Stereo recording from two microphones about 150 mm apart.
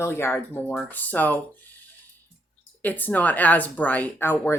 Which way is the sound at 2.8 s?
10° left (ahead or behind).